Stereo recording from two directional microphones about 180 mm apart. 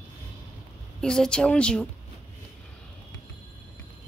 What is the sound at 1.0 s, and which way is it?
Speech, 5° left (ahead or behind).